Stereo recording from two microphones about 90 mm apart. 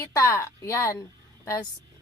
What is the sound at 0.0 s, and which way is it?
Speech, 35° left (ahead or behind).